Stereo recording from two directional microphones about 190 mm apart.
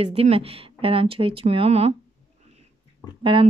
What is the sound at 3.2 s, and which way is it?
Speech, 25° right (ahead or behind).